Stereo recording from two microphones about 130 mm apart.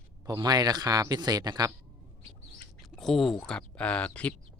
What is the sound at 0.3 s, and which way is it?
Speech, 30° right (ahead or behind).